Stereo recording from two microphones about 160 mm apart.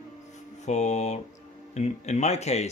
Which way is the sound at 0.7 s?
45° left (ahead or behind).